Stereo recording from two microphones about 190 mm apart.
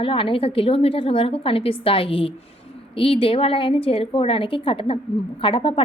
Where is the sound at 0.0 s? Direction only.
30° left (ahead or behind).